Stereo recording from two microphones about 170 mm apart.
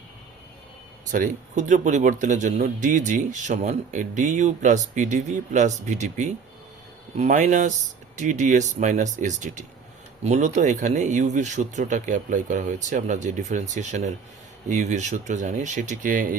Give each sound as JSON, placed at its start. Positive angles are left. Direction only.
{"t": 1.1, "sound": "a man's voice", "side_deg": -50}